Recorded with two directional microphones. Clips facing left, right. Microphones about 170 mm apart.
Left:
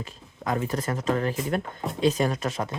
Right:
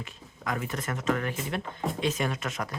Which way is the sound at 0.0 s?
30° left (ahead or behind).